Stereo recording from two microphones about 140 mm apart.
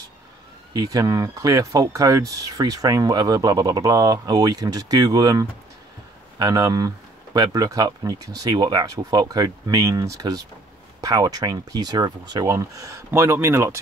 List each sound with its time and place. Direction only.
0.7 s speech: 25° right (ahead or behind)